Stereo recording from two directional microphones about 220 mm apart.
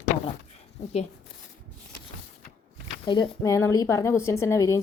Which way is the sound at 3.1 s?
20° left (ahead or behind).